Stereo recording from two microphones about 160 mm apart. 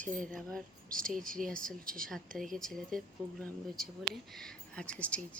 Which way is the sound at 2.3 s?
Centre (ahead or behind).